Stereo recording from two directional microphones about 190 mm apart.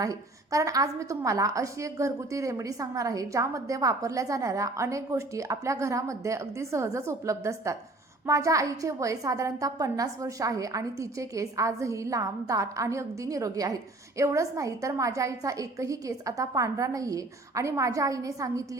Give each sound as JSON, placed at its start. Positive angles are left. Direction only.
{"t": 0.0, "sound": "a woman's voice", "side_deg": -15}